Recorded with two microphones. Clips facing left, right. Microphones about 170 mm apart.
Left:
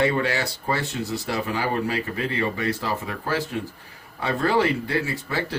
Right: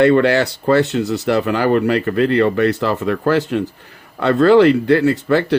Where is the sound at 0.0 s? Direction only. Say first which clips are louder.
Right 10 dB; 70° right (ahead or behind).